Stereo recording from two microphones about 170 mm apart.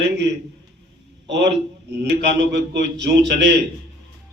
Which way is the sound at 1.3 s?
90° right.